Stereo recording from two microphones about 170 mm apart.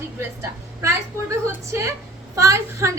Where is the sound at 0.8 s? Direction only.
15° right (ahead or behind).